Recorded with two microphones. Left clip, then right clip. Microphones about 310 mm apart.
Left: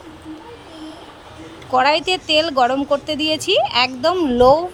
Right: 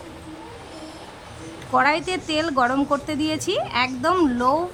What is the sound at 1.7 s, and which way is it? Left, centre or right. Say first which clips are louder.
A woman's voice: left 4 dB; centre.